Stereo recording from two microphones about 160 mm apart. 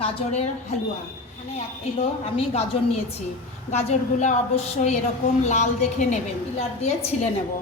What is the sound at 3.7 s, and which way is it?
A woman's voice, 45° left (ahead or behind).